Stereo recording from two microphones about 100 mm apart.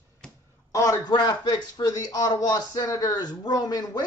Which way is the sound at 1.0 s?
45° left (ahead or behind).